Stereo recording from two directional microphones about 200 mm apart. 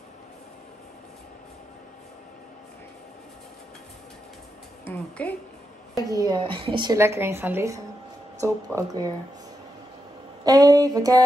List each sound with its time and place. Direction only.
4.8 s a woman's voice: 5° left (ahead or behind)
6.0 s a woman's voice: 20° right (ahead or behind)
10.4 s a woman's voice: 20° right (ahead or behind)